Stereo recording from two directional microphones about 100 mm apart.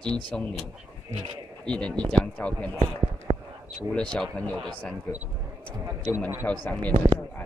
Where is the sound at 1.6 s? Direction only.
10° left (ahead or behind).